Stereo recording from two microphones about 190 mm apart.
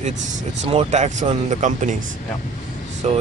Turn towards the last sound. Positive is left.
turn(degrees=-35)  # may be behind; listen again after turning